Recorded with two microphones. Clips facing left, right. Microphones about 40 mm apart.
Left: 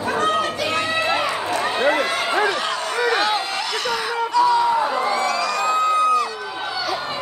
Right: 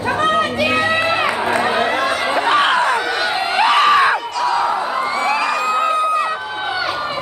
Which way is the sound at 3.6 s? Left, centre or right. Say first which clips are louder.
Right 12 dB; right.